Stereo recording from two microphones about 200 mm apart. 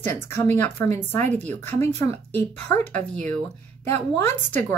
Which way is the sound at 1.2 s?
35° right (ahead or behind).